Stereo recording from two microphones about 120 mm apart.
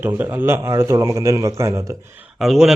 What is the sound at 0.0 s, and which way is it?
A man's voice, 15° right (ahead or behind).